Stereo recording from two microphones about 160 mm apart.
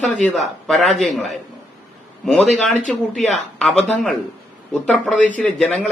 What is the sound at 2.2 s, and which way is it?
A man's voice, centre (ahead or behind).